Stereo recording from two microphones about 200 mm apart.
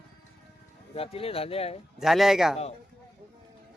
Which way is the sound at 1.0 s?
30° left (ahead or behind).